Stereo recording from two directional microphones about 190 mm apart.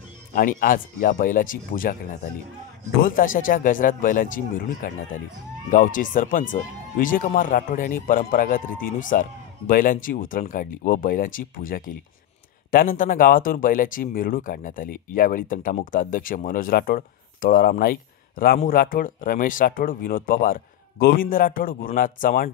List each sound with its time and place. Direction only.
0.3 s speech: 50° left (ahead or behind)
3.0 s speech: 45° left (ahead or behind)